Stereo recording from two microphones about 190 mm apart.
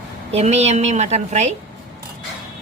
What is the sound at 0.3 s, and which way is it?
A woman's voice, 35° right (ahead or behind).